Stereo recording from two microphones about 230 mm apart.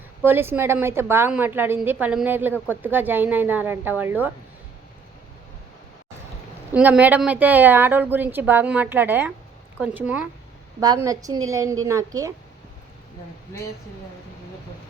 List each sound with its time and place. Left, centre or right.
0.3 s a woman's voice: centre
6.7 s a woman's voice: centre